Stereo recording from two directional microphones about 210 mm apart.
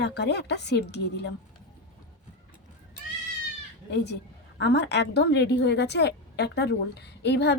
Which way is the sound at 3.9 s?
55° left (ahead or behind).